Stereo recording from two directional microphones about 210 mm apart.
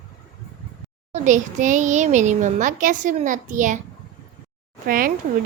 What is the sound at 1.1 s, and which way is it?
A child's voice, 35° right (ahead or behind).